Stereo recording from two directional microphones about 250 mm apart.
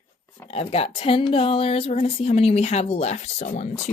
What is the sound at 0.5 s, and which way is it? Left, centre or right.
Speech, left.